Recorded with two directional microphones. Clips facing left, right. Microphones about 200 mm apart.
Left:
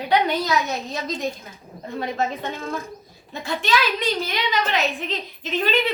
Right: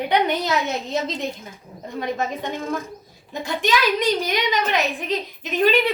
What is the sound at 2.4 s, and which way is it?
A woman's voice, 15° right (ahead or behind).